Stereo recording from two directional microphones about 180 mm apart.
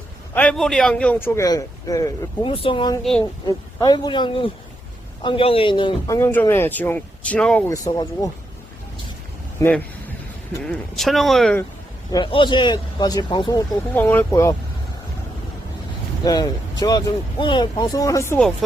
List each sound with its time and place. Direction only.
0.3 s a man's voice: 5° left (ahead or behind)
2.5 s speech: 30° left (ahead or behind)
3.0 s speech: 5° left (ahead or behind)
3.4 s speech: 20° left (ahead or behind)
6.1 s a man's voice: 15° left (ahead or behind)
7.7 s speech: 20° left (ahead or behind)
9.6 s a man's voice: 20° left (ahead or behind)
10.7 s speech: centre (ahead or behind)
12.1 s speech: 25° left (ahead or behind)
13.9 s a man's voice: 10° left (ahead or behind)
16.2 s speech: 20° left (ahead or behind)